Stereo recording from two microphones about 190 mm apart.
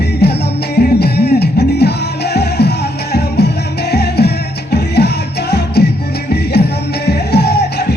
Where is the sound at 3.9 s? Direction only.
60° left (ahead or behind).